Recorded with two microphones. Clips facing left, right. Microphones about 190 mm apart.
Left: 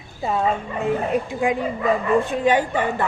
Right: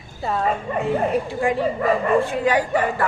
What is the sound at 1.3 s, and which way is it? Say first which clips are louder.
A woman's voice: right 1 dB; 20° left (ahead or behind).